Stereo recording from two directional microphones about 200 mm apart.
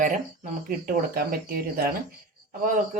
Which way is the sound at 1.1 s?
45° right (ahead or behind).